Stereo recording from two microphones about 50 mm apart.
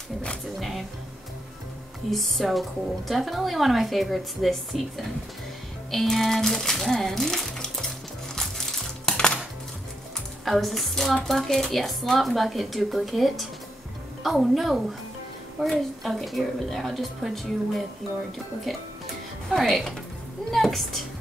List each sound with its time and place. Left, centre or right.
0.6 s speech: centre
2.0 s speech: centre
8.4 s music: centre
9.1 s dishes: centre
10.4 s a woman's voice: centre